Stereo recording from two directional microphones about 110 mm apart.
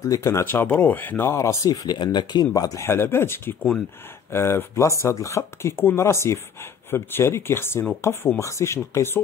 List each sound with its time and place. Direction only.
0.0 s speech: 25° left (ahead or behind)